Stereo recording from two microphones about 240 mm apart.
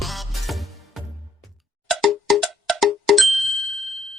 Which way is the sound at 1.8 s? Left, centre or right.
Centre.